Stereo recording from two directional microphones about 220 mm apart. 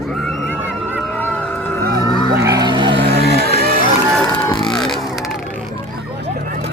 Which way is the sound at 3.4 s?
25° left (ahead or behind).